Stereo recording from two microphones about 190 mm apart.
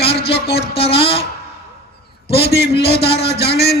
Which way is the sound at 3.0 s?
30° left (ahead or behind).